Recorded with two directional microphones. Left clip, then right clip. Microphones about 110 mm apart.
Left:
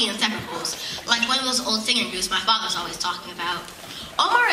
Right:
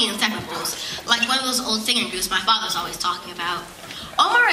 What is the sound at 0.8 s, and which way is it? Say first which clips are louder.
A man's voice: right 2 dB; 15° right (ahead or behind).